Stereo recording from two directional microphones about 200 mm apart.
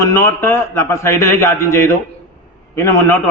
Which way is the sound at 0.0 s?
15° left (ahead or behind).